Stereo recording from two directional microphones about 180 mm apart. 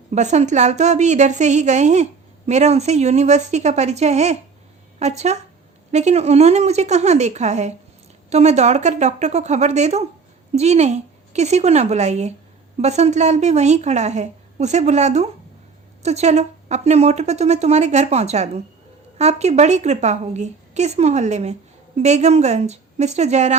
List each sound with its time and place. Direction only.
0.1 s a woman's voice: 40° right (ahead or behind)